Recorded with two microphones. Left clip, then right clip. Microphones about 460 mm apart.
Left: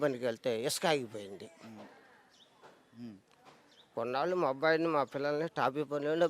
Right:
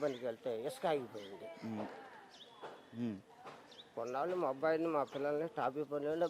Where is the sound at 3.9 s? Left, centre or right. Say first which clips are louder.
Left 5 dB; left.